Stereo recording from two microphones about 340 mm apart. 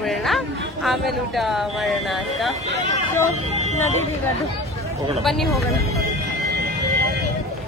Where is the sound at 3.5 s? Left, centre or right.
Centre.